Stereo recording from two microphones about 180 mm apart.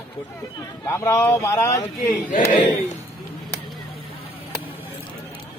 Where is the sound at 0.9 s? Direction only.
15° left (ahead or behind).